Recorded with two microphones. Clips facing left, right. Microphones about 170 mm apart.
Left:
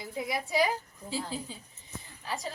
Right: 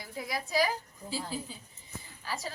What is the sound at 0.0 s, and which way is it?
Speech, 20° left (ahead or behind).